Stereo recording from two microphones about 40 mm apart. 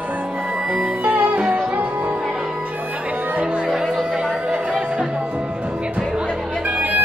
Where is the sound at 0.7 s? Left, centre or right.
Right.